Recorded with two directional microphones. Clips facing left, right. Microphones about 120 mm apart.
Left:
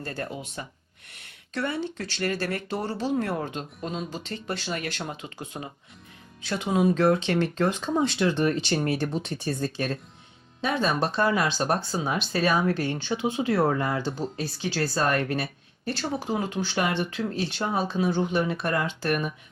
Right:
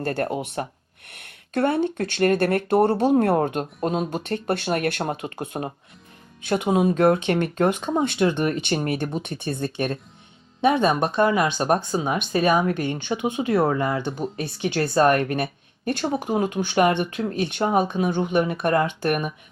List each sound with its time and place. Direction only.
0.0 s speech: 60° right (ahead or behind)
10.6 s speech: 20° right (ahead or behind)
10.8 s speech: 55° right (ahead or behind)
11.2 s speech: 20° right (ahead or behind)
14.0 s speech: 60° right (ahead or behind)